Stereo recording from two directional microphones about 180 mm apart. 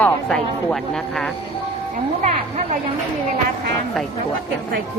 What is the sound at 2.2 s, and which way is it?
Speech, 45° right (ahead or behind).